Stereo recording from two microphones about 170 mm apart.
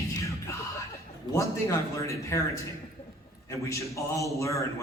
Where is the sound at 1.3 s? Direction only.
20° left (ahead or behind).